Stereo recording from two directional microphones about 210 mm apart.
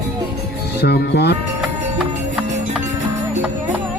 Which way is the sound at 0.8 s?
50° left (ahead or behind).